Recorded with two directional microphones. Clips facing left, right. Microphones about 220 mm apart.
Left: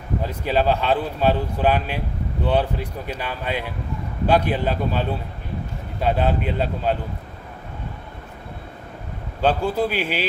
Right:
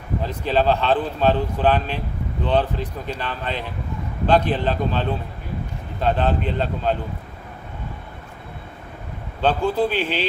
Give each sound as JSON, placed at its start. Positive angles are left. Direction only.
{"t": 0.3, "sound": "speech", "side_deg": 10}
{"t": 9.4, "sound": "speech", "side_deg": 10}